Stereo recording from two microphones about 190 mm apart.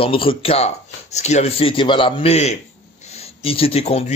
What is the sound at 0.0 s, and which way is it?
A man's voice, 30° left (ahead or behind).